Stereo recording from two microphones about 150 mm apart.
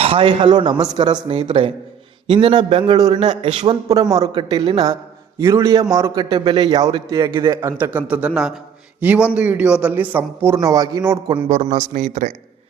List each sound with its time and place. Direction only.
0.0 s a man's voice: 35° right (ahead or behind)
5.4 s a man's voice: 20° right (ahead or behind)
7.5 s a man's voice: 15° right (ahead or behind)
11.4 s speech: 45° right (ahead or behind)